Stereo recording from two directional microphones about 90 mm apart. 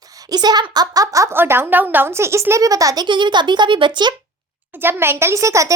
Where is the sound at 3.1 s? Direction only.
60° right (ahead or behind).